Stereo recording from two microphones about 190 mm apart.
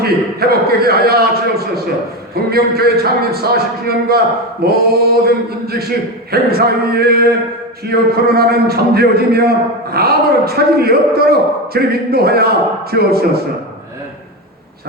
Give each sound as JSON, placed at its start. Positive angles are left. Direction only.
{"t": 0.0, "sound": "a man's voice", "side_deg": -55}
{"t": 6.3, "sound": "a sound", "side_deg": -55}
{"t": 7.9, "sound": "a man's voice", "side_deg": -55}